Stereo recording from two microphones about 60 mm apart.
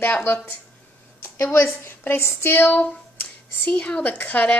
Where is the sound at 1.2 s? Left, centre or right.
Left.